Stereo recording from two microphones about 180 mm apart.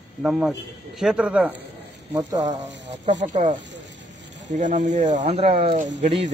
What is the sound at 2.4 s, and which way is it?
Speech, 40° right (ahead or behind).